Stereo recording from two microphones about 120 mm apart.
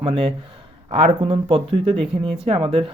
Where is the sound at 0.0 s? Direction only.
50° right (ahead or behind).